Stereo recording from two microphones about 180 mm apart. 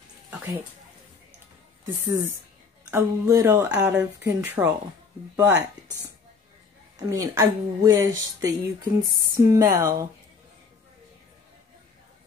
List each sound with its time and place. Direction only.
2.0 s speech: 15° right (ahead or behind)
7.1 s a woman's voice: 15° right (ahead or behind)